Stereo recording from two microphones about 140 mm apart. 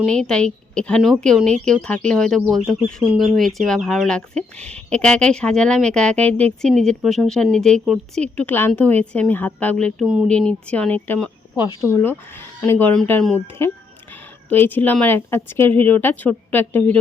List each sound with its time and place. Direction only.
0.1 s a woman's voice: 5° left (ahead or behind)
11.6 s speech: 20° right (ahead or behind)
12.0 s a woman's voice: 15° left (ahead or behind)